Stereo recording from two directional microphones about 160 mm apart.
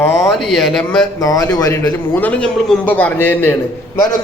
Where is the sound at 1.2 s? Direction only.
20° left (ahead or behind).